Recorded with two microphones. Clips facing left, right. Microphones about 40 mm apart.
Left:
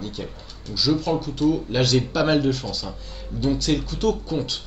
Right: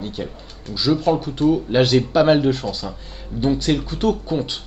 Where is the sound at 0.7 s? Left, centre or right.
Right.